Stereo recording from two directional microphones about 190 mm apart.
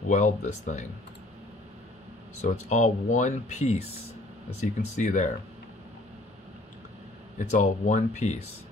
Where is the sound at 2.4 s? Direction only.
40° left (ahead or behind).